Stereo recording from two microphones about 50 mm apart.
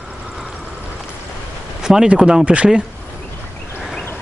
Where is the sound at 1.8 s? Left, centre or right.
Centre.